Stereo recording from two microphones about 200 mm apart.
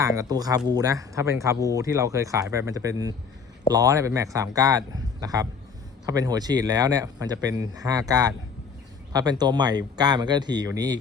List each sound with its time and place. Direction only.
0.0 s a man's voice: 15° right (ahead or behind)
9.4 s a man's voice: 20° right (ahead or behind)